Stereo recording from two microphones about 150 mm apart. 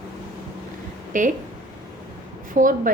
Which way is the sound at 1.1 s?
60° right (ahead or behind).